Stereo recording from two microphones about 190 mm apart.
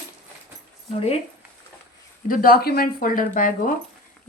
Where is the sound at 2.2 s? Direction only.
45° left (ahead or behind).